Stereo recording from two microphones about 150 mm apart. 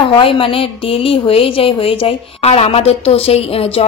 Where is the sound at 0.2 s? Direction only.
35° left (ahead or behind).